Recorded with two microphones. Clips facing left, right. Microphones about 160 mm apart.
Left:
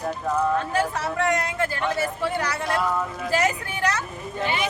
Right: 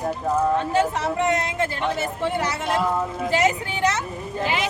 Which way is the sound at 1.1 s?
20° right (ahead or behind).